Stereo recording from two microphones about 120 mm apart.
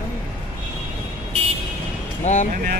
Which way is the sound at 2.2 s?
80° left.